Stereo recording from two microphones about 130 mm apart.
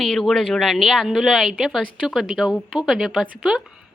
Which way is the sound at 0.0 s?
Centre (ahead or behind).